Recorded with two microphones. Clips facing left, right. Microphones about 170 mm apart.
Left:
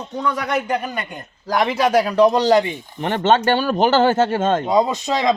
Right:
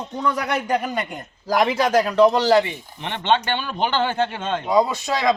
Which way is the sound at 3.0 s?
45° left (ahead or behind).